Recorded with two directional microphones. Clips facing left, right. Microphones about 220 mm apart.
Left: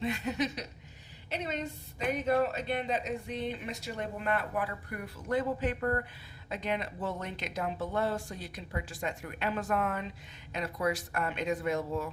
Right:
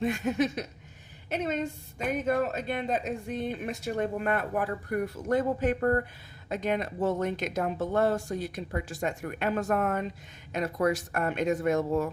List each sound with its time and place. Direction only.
0.0 s speech: 50° right (ahead or behind)